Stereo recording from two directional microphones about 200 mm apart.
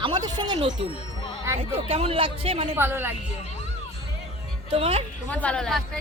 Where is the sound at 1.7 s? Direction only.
30° right (ahead or behind).